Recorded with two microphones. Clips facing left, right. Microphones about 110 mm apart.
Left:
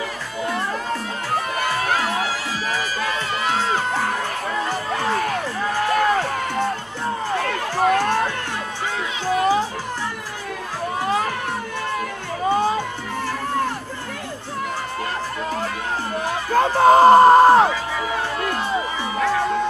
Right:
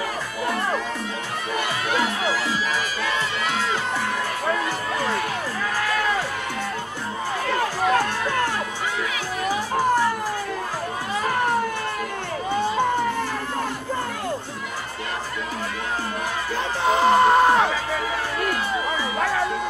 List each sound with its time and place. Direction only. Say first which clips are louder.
1.9 s music: left 1 dB; 45° left (ahead or behind)
7.8 s music: left 6 dB; 50° left (ahead or behind)
16.5 s a sound: left 9 dB; 45° left (ahead or behind)